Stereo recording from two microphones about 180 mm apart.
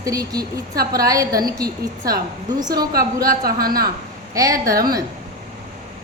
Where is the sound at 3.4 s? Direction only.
55° right (ahead or behind).